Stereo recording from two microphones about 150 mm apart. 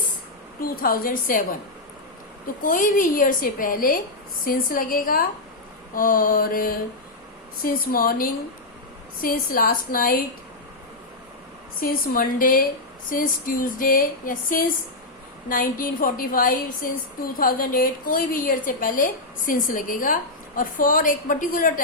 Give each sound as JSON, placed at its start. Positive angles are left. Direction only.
{"t": 0.6, "sound": "a woman's voice", "side_deg": 75}
{"t": 2.6, "sound": "a woman's voice", "side_deg": 65}
{"t": 11.8, "sound": "a woman's voice", "side_deg": 75}